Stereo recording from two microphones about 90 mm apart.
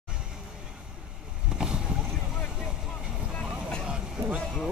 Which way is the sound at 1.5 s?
10° right (ahead or behind).